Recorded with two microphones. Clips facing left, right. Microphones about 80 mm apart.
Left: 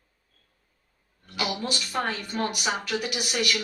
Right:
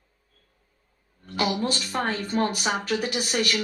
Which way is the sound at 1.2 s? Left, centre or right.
Right.